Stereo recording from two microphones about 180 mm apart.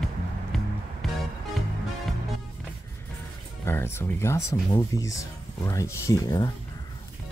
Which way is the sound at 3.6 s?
15° left (ahead or behind).